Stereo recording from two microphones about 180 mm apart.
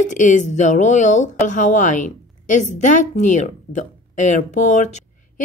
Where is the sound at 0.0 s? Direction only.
45° left (ahead or behind).